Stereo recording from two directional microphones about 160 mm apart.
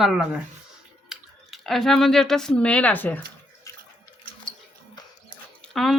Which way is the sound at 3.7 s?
20° left (ahead or behind).